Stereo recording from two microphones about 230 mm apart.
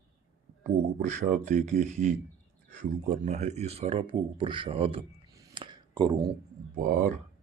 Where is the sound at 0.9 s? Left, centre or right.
Right.